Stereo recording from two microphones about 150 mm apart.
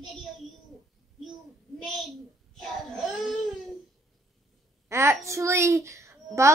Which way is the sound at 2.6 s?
5° left (ahead or behind).